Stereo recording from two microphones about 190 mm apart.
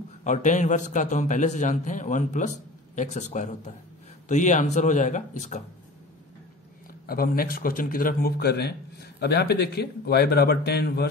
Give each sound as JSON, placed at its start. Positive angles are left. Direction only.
{"t": 0.2, "sound": "a man's voice", "side_deg": 40}
{"t": 7.1, "sound": "a man's voice", "side_deg": 50}